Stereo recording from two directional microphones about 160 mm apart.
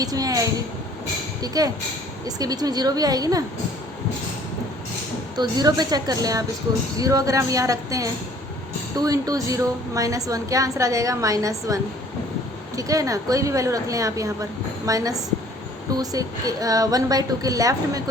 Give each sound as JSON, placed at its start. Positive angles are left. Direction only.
{"t": 0.0, "sound": "a woman's voice", "side_deg": -25}
{"t": 5.4, "sound": "a woman's voice", "side_deg": -25}